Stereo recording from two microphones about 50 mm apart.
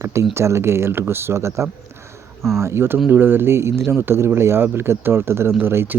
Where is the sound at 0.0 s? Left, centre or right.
Right.